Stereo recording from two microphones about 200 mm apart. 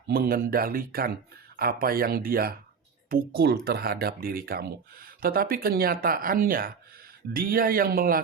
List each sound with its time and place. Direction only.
0.1 s speech: 50° right (ahead or behind)